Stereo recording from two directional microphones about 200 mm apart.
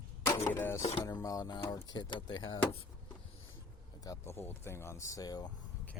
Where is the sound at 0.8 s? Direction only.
30° left (ahead or behind).